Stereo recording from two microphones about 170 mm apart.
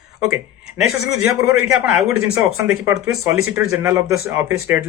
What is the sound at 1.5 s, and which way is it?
Speech, 10° right (ahead or behind).